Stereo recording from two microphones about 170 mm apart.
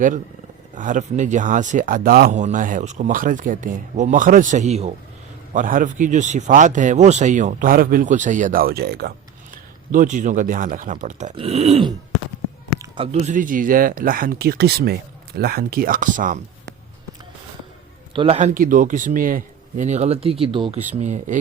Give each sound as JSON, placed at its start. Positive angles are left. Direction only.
{"t": 0.8, "sound": "speech", "side_deg": -50}
{"t": 2.3, "sound": "speech", "side_deg": -45}
{"t": 5.5, "sound": "speech", "side_deg": -50}
{"t": 11.3, "sound": "speech", "side_deg": -35}
{"t": 13.0, "sound": "speech", "side_deg": -40}
{"t": 18.1, "sound": "a man's voice", "side_deg": -30}
{"t": 18.3, "sound": "speech", "side_deg": -50}
{"t": 20.4, "sound": "speech", "side_deg": -30}